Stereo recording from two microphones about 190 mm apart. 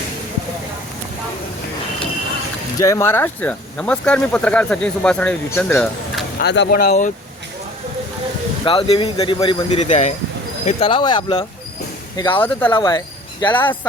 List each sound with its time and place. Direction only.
2.7 s speech: 15° left (ahead or behind)
6.4 s speech: 65° left (ahead or behind)
8.6 s speech: 25° left (ahead or behind)
12.4 s speech: 10° left (ahead or behind)
12.7 s speech: 20° left (ahead or behind)